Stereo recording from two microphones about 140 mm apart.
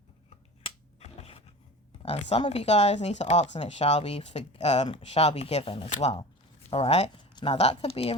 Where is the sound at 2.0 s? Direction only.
45° left (ahead or behind).